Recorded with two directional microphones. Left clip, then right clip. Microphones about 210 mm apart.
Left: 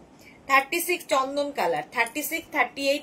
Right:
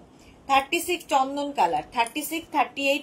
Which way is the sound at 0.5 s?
20° left (ahead or behind).